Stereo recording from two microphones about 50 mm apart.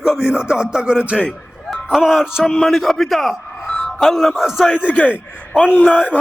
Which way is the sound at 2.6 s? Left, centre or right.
Centre.